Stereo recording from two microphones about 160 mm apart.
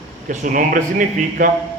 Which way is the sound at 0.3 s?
55° right (ahead or behind).